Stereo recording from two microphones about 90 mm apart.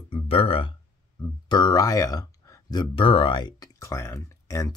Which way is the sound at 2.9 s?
75° left (ahead or behind).